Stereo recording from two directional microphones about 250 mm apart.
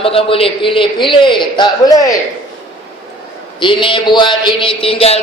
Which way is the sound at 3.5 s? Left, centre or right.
Centre.